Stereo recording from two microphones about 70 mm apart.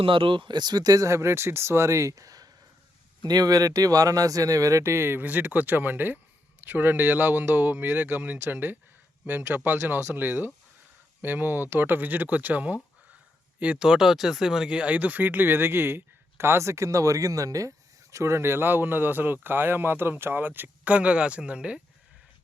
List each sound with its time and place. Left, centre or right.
0.4 s speech: right; by 21.8 s centre